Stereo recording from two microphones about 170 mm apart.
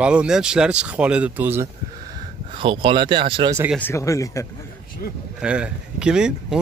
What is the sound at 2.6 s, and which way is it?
Speech, 30° right (ahead or behind).